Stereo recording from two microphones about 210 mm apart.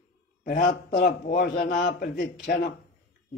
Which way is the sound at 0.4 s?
45° left (ahead or behind).